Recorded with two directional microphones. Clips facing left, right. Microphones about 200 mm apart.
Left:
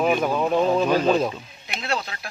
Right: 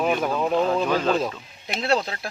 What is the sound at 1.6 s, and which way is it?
Speech, 35° right (ahead or behind).